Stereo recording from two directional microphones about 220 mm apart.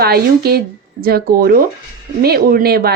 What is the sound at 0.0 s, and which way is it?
A woman's voice, 45° right (ahead or behind).